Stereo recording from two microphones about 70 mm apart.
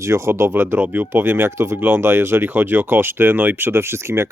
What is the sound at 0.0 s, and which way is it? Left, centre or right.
Speech, right.